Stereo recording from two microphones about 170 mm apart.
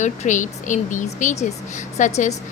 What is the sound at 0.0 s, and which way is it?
A woman's voice, 45° left (ahead or behind).